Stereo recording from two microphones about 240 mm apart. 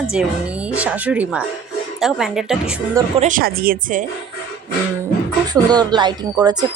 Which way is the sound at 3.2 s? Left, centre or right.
Right.